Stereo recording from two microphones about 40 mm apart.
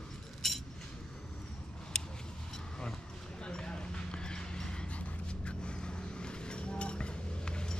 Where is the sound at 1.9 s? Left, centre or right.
Centre.